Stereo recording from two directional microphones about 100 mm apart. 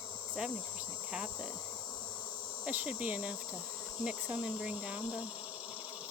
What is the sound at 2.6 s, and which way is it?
Speech, 10° right (ahead or behind).